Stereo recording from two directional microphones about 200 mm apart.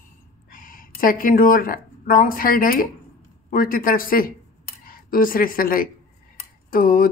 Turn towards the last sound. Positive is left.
turn(degrees=45)  # may be behind; listen again after turning